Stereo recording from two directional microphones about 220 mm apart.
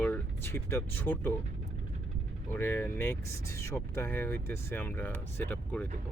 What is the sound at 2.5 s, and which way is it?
Speech, 10° left (ahead or behind).